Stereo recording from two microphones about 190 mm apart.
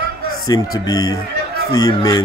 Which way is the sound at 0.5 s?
20° left (ahead or behind).